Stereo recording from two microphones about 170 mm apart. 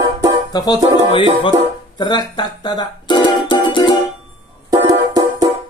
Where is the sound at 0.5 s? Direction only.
25° left (ahead or behind).